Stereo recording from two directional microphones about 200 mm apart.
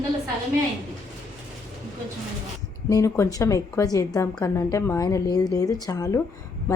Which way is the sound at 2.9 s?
15° left (ahead or behind).